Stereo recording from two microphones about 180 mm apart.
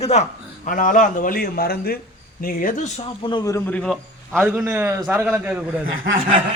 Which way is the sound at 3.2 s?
25° left (ahead or behind).